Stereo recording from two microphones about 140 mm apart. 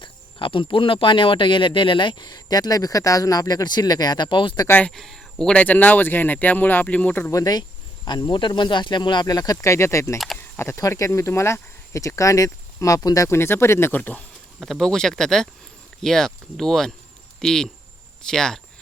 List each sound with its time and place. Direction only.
0.0 s speech: 35° left (ahead or behind)
4.6 s speech: 15° left (ahead or behind)
4.9 s speech: centre (ahead or behind)
7.3 s speech: 25° left (ahead or behind); by 18.6 s 5° left (ahead or behind)